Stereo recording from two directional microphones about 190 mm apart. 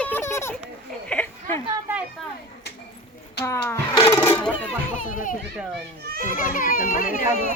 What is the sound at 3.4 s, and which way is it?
Speech, 15° left (ahead or behind).